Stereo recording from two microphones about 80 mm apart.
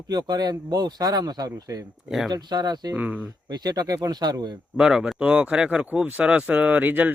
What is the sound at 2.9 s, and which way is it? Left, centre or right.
Speech, centre.